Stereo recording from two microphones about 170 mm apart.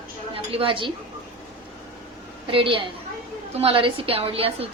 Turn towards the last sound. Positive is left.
turn(degrees=-35)  # may be behind; listen again after turning